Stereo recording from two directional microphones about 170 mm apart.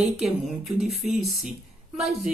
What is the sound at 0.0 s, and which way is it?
Speech, centre (ahead or behind).